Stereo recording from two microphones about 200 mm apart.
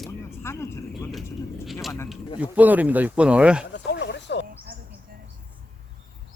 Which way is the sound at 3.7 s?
60° left (ahead or behind).